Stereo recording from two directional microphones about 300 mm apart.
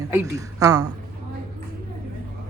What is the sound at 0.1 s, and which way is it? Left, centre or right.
Speech, centre.